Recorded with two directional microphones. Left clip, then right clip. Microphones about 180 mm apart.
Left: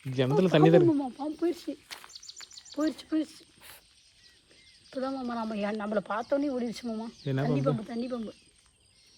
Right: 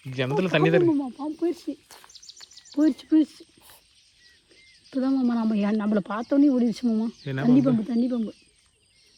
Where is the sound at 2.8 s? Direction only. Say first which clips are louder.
Right 9 dB; 35° right (ahead or behind).